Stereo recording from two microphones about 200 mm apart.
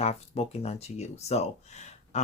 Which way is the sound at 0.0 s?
30° left (ahead or behind).